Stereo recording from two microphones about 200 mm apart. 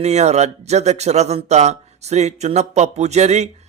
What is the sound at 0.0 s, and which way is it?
A man's voice, 35° right (ahead or behind).